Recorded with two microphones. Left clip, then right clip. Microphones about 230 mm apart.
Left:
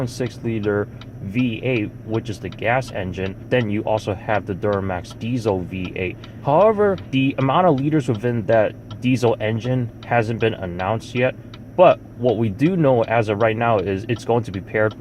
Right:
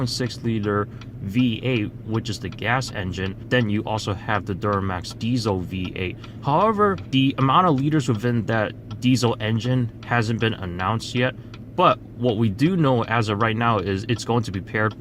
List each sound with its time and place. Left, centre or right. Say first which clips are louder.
0.4 s speech: left 3 dB; right